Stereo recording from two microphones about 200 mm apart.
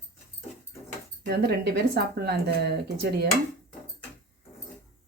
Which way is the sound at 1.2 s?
50° right (ahead or behind).